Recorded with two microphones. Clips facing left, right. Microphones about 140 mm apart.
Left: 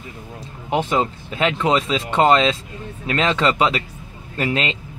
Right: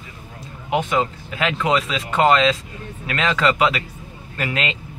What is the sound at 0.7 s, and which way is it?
Speech, 30° left (ahead or behind).